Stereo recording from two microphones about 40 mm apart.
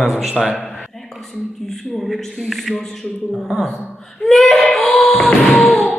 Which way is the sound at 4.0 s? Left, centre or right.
Centre.